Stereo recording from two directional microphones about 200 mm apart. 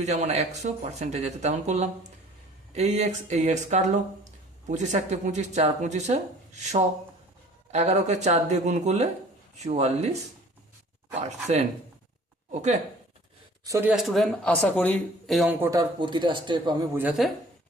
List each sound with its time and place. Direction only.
0.0 s speech: 35° right (ahead or behind)
13.7 s speech: 15° right (ahead or behind)
13.9 s speech: centre (ahead or behind)
15.6 s speech: 15° right (ahead or behind)
16.9 s speech: 5° right (ahead or behind)